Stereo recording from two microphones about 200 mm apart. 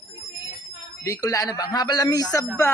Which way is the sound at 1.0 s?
15° left (ahead or behind).